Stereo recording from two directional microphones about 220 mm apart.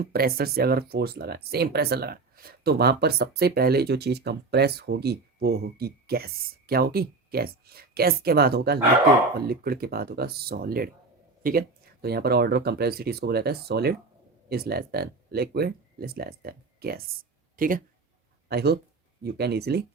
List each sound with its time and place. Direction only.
0.0 s speech: 45° right (ahead or behind)